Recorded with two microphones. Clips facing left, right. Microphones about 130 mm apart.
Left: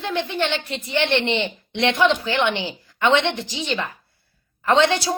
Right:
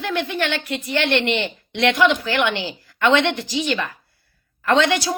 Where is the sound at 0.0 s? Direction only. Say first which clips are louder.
Even; 25° left (ahead or behind).